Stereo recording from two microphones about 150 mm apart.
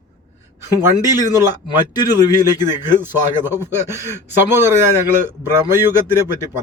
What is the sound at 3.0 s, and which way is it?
Speech, 15° right (ahead or behind).